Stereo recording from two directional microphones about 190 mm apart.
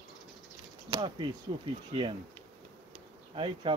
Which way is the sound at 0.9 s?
25° right (ahead or behind).